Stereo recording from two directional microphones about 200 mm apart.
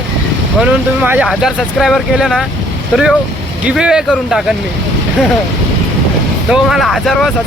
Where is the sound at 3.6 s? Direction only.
5° right (ahead or behind).